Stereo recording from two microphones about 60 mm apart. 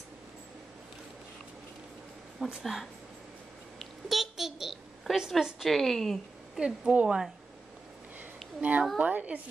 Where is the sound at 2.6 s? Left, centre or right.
Centre.